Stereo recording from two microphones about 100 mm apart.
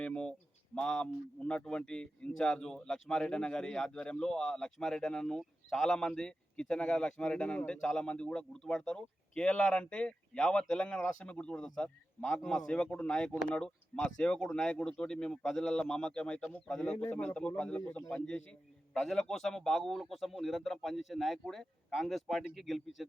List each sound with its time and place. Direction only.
0.0 s a man's voice: 10° left (ahead or behind)
18.9 s a man's voice: 5° left (ahead or behind)